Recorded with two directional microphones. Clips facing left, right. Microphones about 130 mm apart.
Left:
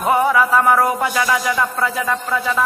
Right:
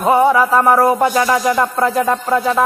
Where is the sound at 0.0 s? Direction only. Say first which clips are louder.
Right 4 dB; 30° right (ahead or behind).